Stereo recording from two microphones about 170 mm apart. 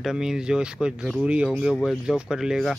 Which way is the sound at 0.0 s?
5° right (ahead or behind).